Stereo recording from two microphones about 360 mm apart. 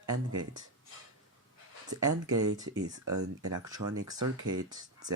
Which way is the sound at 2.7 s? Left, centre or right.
Centre.